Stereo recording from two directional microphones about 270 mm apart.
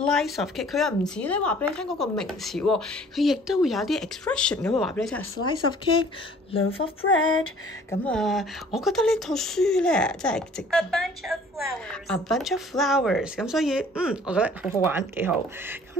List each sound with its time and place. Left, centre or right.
0.0 s speech: centre
5.4 s speech: centre
8.0 s speech: centre